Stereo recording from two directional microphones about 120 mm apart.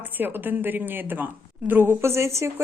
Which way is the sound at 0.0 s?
15° right (ahead or behind).